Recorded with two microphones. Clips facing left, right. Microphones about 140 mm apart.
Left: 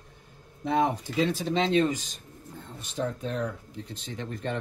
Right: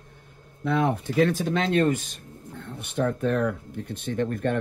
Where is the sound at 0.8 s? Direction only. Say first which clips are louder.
Right 5 dB; 55° right (ahead or behind).